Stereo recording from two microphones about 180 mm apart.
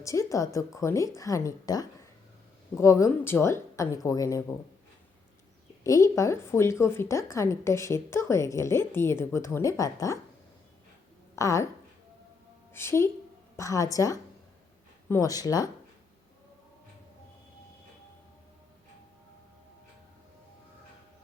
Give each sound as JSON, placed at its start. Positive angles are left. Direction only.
{"t": 0.0, "sound": "a woman's voice", "side_deg": 15}
{"t": 5.8, "sound": "a woman's voice", "side_deg": 15}
{"t": 11.3, "sound": "a woman's voice", "side_deg": 15}
{"t": 12.7, "sound": "a woman's voice", "side_deg": 15}